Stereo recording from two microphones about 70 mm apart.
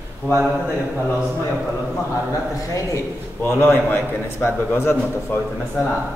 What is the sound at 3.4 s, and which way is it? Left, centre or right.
A man's voice, left.